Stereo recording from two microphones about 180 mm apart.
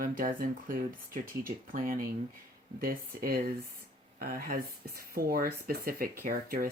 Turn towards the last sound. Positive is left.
turn(degrees=-55)  # may be behind; listen again after turning